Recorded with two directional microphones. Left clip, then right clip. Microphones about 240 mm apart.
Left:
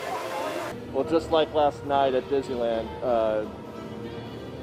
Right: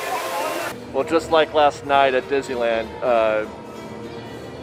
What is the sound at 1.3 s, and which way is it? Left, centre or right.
A man's voice, right.